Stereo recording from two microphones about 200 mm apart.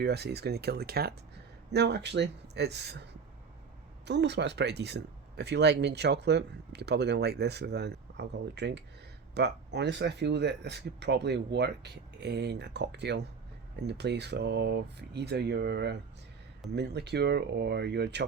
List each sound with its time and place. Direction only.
0.0 s speech: 55° right (ahead or behind)